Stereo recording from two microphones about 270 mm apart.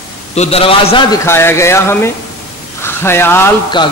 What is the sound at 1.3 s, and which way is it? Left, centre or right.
A man's voice, centre.